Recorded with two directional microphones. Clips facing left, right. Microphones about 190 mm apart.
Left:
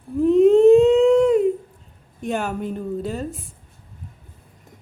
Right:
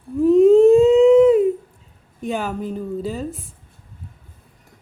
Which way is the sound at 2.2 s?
Centre (ahead or behind).